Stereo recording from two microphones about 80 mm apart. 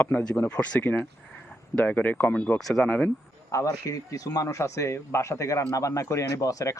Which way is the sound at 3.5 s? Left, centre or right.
Left.